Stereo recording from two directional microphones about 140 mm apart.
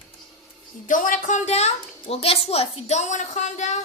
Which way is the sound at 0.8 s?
70° left (ahead or behind).